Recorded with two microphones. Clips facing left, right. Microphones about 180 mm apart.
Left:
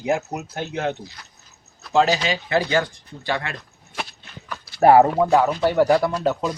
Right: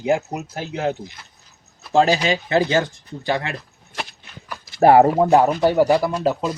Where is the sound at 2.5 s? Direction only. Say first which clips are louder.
Right 1 dB; 25° right (ahead or behind).